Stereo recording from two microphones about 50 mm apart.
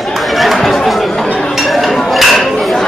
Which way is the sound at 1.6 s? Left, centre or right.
Centre.